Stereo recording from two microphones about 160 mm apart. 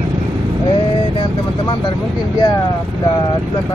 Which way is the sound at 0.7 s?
30° left (ahead or behind).